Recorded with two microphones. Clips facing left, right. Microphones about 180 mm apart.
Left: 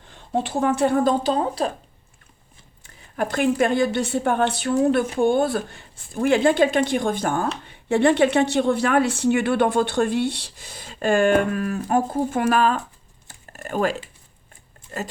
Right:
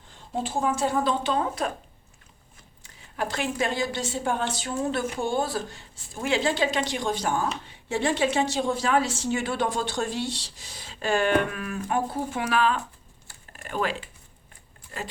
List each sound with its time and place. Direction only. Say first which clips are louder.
0.1 s a woman's voice: left 5 dB; 65° left (ahead or behind)
1.2 s speech: left 4 dB; 35° left (ahead or behind)
2.8 s a woman's voice: left 5 dB; 50° left (ahead or behind)
13.5 s a sound: left 6 dB; 45° left (ahead or behind)
14.9 s speech: left 5 dB; 45° left (ahead or behind)